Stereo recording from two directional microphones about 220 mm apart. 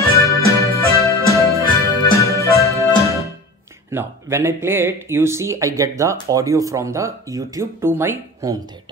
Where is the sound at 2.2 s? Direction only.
15° left (ahead or behind).